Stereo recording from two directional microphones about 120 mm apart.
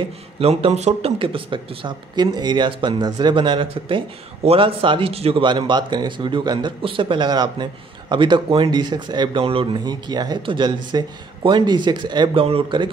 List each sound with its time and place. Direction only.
0.0 s a man's voice: 55° right (ahead or behind); by 9.4 s 40° right (ahead or behind)
9.4 s speech: 50° right (ahead or behind)
9.8 s a man's voice: 35° right (ahead or behind)